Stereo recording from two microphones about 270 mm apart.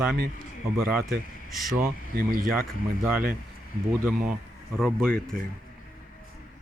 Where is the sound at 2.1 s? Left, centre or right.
Right.